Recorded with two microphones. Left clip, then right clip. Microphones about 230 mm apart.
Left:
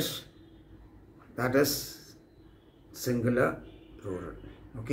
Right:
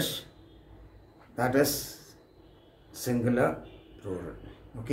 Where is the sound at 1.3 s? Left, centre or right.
Centre.